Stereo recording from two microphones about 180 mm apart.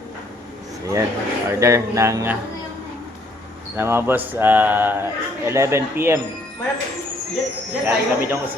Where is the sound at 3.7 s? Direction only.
10° right (ahead or behind).